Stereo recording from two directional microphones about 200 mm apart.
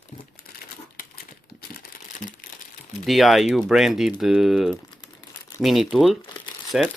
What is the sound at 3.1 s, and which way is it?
Speech, centre (ahead or behind).